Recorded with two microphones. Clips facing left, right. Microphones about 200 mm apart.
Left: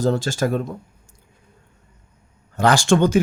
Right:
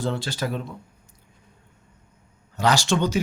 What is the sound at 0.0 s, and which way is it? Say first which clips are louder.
Speech: left 7 dB; 40° left (ahead or behind).